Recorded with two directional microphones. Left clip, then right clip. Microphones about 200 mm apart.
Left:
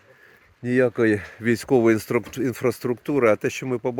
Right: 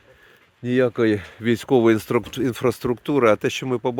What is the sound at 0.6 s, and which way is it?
Speech, centre (ahead or behind).